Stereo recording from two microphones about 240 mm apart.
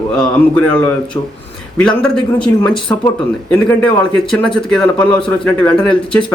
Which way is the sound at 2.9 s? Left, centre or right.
Centre.